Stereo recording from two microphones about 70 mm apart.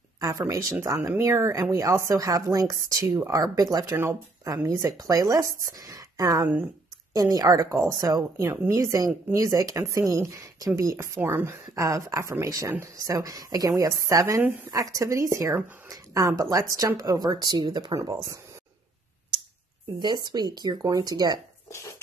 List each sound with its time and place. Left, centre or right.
0.2 s speech: right
1.4 s speech: right
3.9 s speech: right
4.5 s speech: right
11.1 s speech: right
11.7 s speech: right
18.0 s speech: right
20.0 s speech: right
20.8 s speech: right